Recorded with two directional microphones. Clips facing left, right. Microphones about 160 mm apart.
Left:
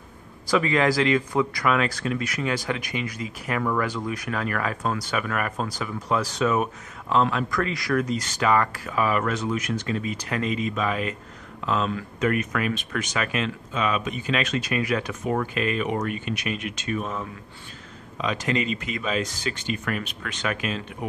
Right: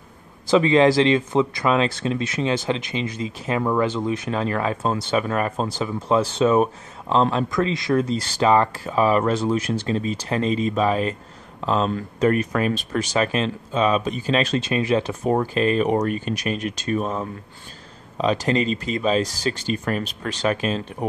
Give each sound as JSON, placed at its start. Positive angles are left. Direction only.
{"t": 0.5, "sound": "speech", "side_deg": -25}